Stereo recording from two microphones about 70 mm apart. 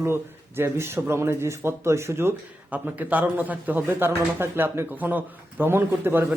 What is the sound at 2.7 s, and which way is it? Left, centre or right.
A man's voice, right.